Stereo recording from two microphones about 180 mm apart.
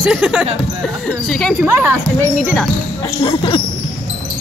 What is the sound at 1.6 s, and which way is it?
Speech, 10° right (ahead or behind).